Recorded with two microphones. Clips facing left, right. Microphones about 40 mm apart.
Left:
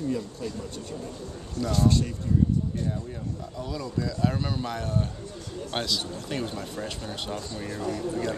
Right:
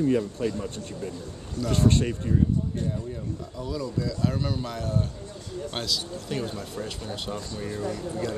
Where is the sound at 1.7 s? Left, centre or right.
Right.